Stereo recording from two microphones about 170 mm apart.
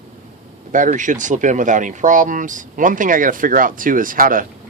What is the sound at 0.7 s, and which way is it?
Speech, 50° right (ahead or behind).